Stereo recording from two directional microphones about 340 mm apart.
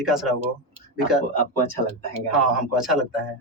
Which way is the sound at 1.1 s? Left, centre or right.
Centre.